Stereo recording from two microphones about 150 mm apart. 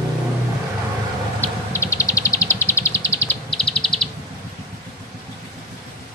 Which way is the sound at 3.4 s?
5° left (ahead or behind).